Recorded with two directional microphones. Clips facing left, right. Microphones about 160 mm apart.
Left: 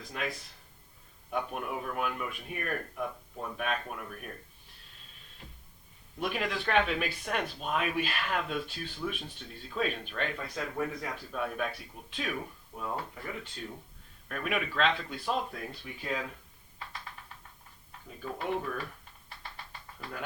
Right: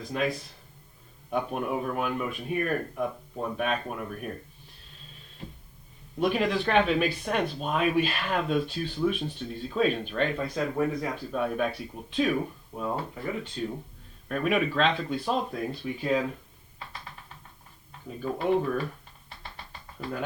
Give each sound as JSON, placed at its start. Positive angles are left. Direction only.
{"t": 0.1, "sound": "speech", "side_deg": -25}
{"t": 6.1, "sound": "speech", "side_deg": -30}
{"t": 18.2, "sound": "speech", "side_deg": -25}
{"t": 19.3, "sound": "a sound", "side_deg": -20}